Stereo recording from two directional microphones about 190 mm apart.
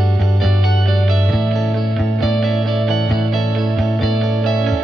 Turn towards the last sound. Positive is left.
turn(degrees=0)  # may be behind; listen again after turning